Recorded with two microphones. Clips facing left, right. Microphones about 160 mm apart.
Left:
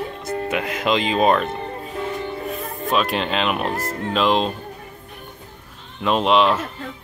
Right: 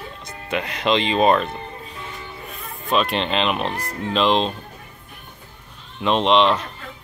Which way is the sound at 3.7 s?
45° left (ahead or behind).